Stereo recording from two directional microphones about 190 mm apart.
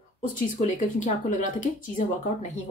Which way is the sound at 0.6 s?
40° left (ahead or behind).